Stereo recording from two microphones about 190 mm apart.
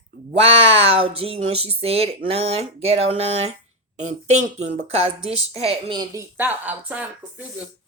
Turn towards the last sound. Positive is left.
turn(degrees=-10)  # may be behind; listen again after turning